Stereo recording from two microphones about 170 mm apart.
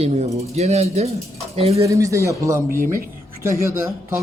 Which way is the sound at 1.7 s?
20° right (ahead or behind).